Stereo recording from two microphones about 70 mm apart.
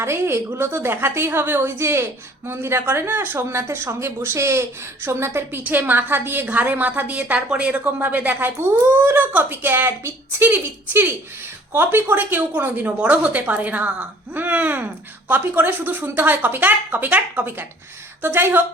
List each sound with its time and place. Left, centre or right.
0.0 s a woman's voice: right